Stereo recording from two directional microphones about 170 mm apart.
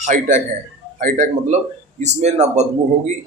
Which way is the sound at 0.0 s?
45° right (ahead or behind).